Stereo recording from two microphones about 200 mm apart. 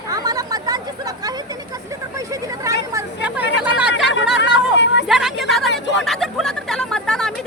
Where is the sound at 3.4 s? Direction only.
60° left (ahead or behind).